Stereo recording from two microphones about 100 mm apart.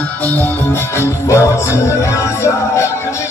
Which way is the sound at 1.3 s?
30° left (ahead or behind).